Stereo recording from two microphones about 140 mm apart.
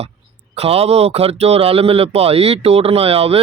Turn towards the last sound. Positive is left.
turn(degrees=-45)  # may be behind; listen again after turning